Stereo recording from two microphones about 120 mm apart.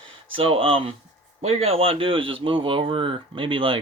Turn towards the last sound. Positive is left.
turn(degrees=-45)  # may be behind; listen again after turning